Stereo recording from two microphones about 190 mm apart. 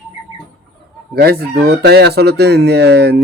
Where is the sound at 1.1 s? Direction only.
55° right (ahead or behind).